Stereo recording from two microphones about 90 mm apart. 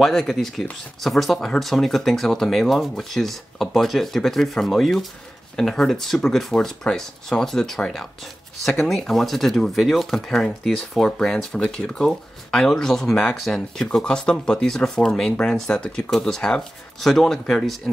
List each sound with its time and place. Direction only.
0.0 s speech: 5° left (ahead or behind)